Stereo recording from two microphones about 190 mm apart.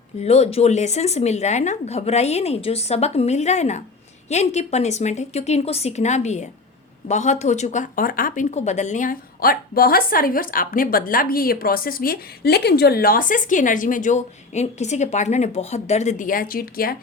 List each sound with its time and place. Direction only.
0.2 s a woman's voice: 35° left (ahead or behind); by 17.0 s 50° left (ahead or behind)